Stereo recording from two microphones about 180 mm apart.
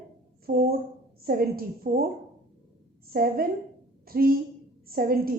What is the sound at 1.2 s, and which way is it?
Speech, 55° right (ahead or behind).